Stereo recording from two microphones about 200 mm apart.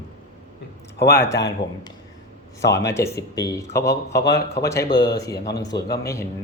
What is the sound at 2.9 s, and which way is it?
A woman's voice, 15° left (ahead or behind).